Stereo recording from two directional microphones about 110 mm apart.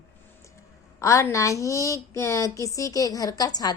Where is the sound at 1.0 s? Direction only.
25° left (ahead or behind).